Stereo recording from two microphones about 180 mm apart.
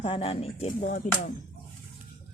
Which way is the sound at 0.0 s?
30° left (ahead or behind).